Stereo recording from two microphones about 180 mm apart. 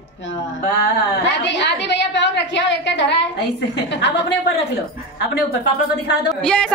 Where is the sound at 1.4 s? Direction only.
75° left (ahead or behind).